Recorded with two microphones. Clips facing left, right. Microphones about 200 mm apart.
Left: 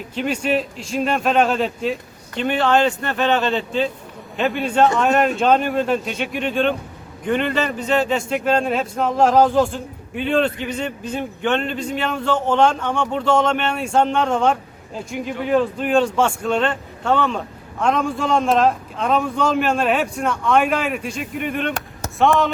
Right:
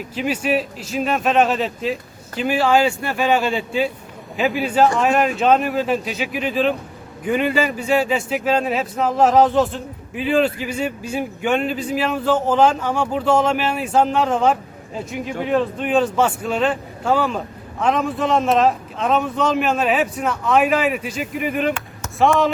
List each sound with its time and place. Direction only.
0.1 s speech: 5° right (ahead or behind)
21.7 s chop: 40° left (ahead or behind)
22.2 s speech: centre (ahead or behind)